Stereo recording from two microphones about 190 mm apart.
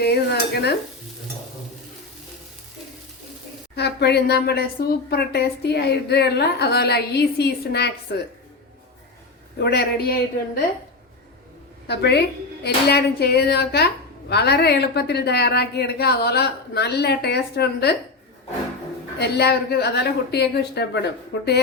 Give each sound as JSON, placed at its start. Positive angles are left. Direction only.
{"t": 0.0, "sound": "stir", "side_deg": 60}
{"t": 3.8, "sound": "a woman's voice", "side_deg": 60}
{"t": 9.6, "sound": "a woman's voice", "side_deg": 55}
{"t": 11.9, "sound": "a woman's voice", "side_deg": 60}
{"t": 19.2, "sound": "a woman's voice", "side_deg": 60}